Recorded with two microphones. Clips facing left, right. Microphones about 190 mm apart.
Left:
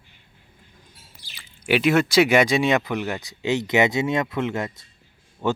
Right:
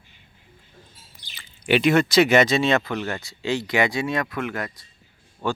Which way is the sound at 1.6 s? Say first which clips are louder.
Right 1 dB; 5° left (ahead or behind).